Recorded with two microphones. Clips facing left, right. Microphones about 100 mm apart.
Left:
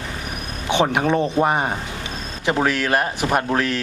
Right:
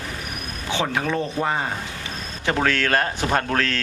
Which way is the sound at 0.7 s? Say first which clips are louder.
Left 5 dB; 20° left (ahead or behind).